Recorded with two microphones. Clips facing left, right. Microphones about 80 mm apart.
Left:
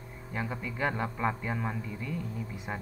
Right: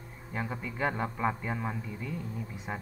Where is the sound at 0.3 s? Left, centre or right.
Centre.